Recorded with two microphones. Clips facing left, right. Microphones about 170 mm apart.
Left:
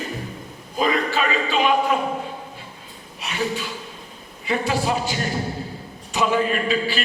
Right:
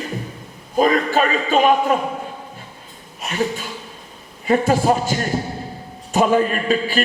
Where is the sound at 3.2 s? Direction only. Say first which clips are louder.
Right 3 dB; 45° right (ahead or behind).